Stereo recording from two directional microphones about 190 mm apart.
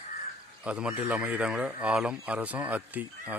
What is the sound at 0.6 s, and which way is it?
Speech, 5° right (ahead or behind).